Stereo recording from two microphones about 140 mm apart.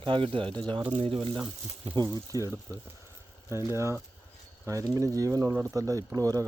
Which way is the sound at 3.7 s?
20° right (ahead or behind).